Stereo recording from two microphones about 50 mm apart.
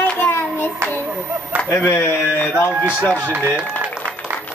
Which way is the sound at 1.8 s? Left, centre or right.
Left.